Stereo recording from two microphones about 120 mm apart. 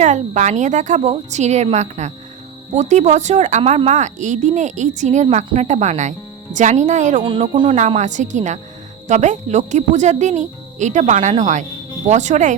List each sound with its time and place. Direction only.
0.0 s a woman's voice: 80° right
3.6 s speech: 55° right (ahead or behind); by 7.2 s 90° right
7.2 s speech: 40° right (ahead or behind)
7.9 s speech: 85° right